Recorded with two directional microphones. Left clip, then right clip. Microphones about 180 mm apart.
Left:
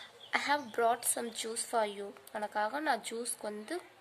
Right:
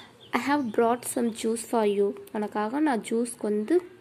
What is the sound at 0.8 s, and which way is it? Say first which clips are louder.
Speech: right 7 dB; 5° left (ahead or behind).